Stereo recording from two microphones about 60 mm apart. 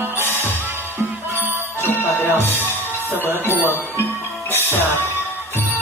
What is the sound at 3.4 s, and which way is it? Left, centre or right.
Bell, left.